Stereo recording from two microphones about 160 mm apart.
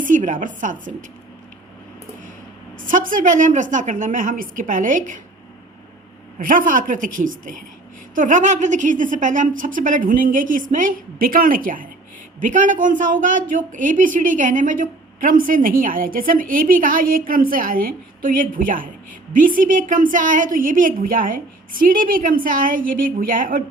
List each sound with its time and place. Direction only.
0.0 s a woman's voice: 55° right (ahead or behind)
2.8 s a man's voice: 60° right (ahead or behind)
6.4 s a man's voice: 60° right (ahead or behind)